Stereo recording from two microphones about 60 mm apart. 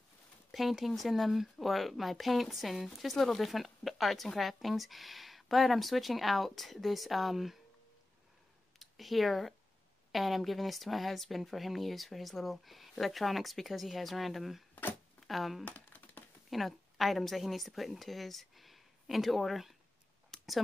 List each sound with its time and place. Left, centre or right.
0.5 s speech: centre
8.7 s speech: centre
15.1 s a sound: centre
15.6 s typing: left
16.4 s a woman's voice: centre
20.2 s a sound: centre